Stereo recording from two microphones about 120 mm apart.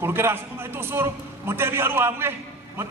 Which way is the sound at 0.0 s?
20° right (ahead or behind).